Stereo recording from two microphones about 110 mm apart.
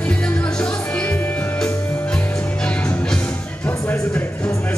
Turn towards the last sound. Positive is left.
turn(degrees=20)  # may be behind; listen again after turning